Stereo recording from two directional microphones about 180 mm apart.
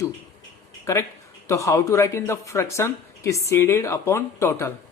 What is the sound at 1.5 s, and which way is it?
Speech, 15° left (ahead or behind).